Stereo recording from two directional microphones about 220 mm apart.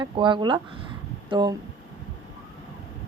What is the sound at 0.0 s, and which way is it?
Speech, 20° right (ahead or behind).